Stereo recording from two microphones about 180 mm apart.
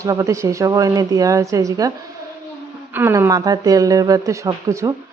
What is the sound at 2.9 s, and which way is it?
A woman's voice, 10° right (ahead or behind).